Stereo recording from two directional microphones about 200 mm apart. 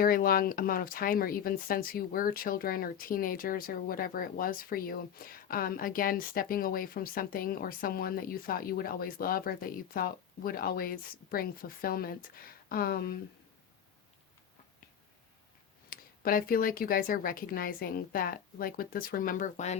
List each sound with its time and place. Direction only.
0.0 s speech: 45° left (ahead or behind)
15.9 s speech: 45° left (ahead or behind)